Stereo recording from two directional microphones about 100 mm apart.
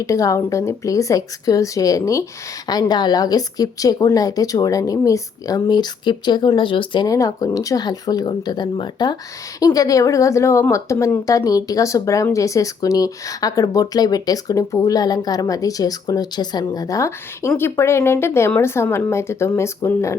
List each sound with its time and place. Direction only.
0.0 s speech: 35° left (ahead or behind); by 7.1 s 55° left (ahead or behind)
7.1 s speech: 35° left (ahead or behind)